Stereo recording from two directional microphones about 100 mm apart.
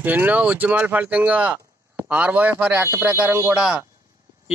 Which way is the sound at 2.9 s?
15° right (ahead or behind).